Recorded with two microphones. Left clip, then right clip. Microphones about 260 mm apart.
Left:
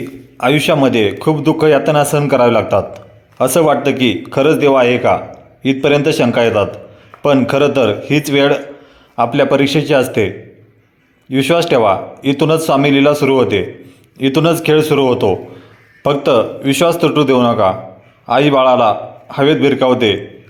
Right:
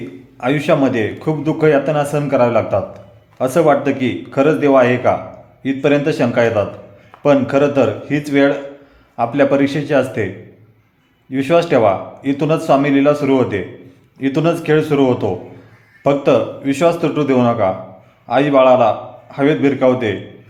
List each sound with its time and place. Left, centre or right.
0.3 s speech: centre
11.3 s speech: centre